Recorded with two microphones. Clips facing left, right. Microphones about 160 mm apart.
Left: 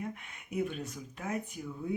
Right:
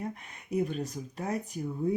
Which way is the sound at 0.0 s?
35° right (ahead or behind).